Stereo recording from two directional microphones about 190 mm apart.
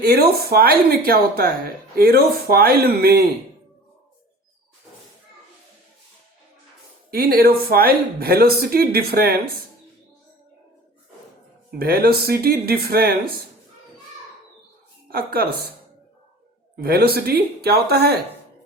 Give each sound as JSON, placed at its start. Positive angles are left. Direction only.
{"t": 0.0, "sound": "speech", "side_deg": -55}
{"t": 7.1, "sound": "speech", "side_deg": -50}
{"t": 11.7, "sound": "speech", "side_deg": -50}
{"t": 15.1, "sound": "speech", "side_deg": -50}
{"t": 16.7, "sound": "speech", "side_deg": -55}